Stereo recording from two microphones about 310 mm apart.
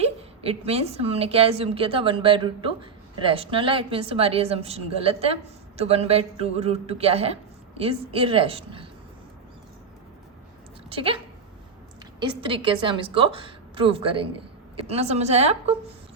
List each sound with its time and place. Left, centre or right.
0.0 s a woman's voice: centre
10.9 s a woman's voice: centre
12.2 s a woman's voice: centre